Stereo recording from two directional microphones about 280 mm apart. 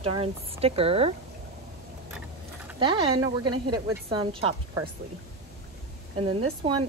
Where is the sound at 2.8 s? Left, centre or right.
Centre.